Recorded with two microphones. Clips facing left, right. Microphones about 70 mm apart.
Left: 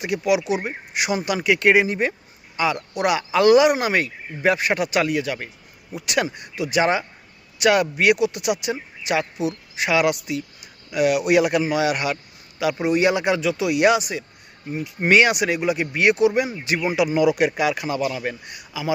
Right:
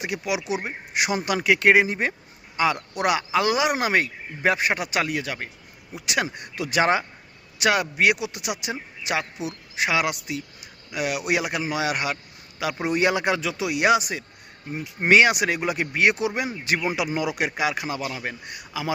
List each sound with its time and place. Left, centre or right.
0.0 s speech: right
0.9 s speech: right
6.6 s speech: right
7.6 s speech: right
12.8 s speech: right; by 18.3 s centre
18.3 s speech: right